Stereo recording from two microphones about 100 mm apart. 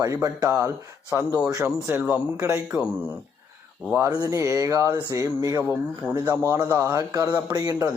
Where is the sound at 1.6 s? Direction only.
15° right (ahead or behind).